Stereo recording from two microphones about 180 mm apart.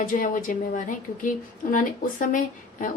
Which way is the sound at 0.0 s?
45° left (ahead or behind).